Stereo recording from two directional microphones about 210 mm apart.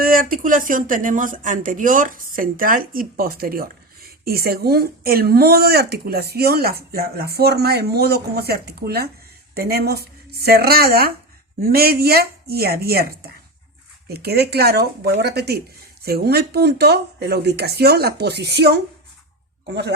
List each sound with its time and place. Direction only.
0.0 s speech: 45° right (ahead or behind)